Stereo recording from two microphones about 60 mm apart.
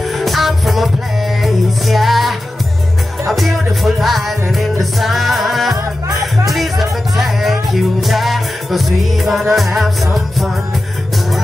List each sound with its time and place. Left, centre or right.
0.2 s music: centre